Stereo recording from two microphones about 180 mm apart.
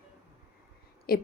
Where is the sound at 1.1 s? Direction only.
55° left (ahead or behind).